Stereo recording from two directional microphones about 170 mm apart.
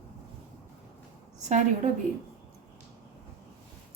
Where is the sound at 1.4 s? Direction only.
45° right (ahead or behind).